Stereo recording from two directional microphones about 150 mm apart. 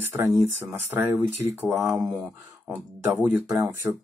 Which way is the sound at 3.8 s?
10° right (ahead or behind).